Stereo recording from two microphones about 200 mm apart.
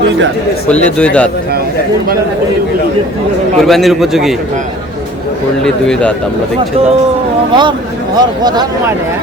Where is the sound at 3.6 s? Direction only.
Centre (ahead or behind).